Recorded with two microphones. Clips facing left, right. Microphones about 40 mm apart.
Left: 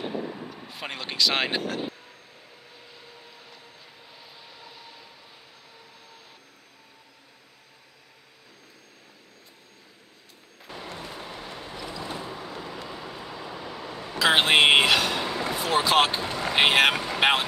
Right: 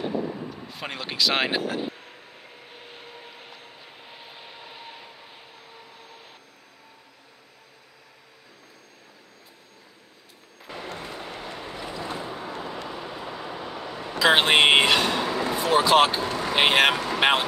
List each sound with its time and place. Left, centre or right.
0.0 s a sound: centre
0.3 s speech: centre
2.7 s vehicle: right
11.1 s vehicle: centre
11.5 s vehicle: right
13.0 s vehicle: right
14.1 s a sound: centre
15.4 s speech: centre